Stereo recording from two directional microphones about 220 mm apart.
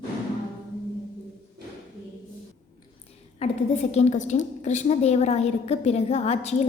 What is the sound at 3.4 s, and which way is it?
A woman's voice, 30° left (ahead or behind).